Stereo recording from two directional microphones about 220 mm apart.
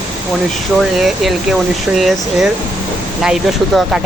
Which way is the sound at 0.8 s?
Centre (ahead or behind).